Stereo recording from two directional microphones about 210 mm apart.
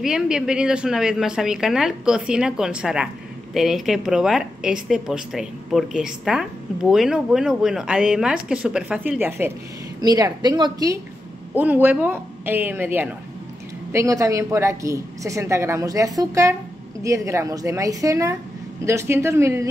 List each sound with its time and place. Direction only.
0.0 s a woman's voice: 5° right (ahead or behind); by 11.0 s 20° right (ahead or behind)
11.5 s a woman's voice: 10° right (ahead or behind)